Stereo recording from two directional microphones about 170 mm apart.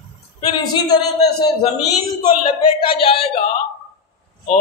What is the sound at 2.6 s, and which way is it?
Speech, 30° left (ahead or behind).